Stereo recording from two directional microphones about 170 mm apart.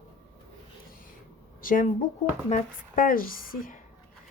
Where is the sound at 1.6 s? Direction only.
55° left (ahead or behind).